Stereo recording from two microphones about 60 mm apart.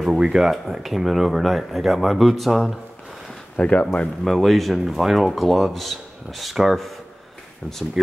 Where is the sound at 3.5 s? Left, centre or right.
Left.